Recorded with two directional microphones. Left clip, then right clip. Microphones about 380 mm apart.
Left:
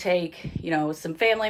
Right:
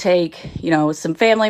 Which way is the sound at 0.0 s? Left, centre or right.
Centre.